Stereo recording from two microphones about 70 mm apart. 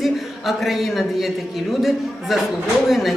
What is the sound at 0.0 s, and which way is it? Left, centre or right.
A man's voice, centre.